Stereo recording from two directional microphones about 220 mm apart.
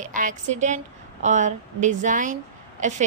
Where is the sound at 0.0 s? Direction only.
35° right (ahead or behind).